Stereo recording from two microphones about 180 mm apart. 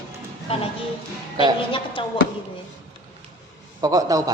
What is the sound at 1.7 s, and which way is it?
Speech, 30° left (ahead or behind).